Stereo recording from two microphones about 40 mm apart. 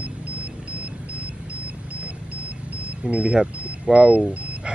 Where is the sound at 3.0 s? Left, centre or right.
Right.